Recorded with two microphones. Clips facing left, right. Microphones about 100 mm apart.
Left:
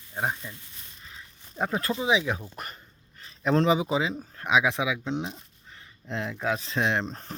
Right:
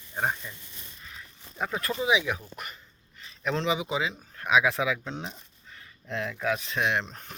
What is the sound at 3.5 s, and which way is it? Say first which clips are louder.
Speech: left 5 dB; 40° left (ahead or behind).